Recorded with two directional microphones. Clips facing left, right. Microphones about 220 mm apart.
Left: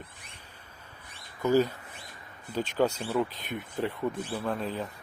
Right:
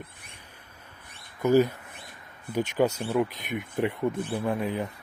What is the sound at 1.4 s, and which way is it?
Speech, 15° right (ahead or behind).